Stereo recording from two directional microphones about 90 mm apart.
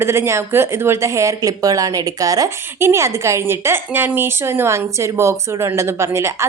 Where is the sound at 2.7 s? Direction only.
30° right (ahead or behind).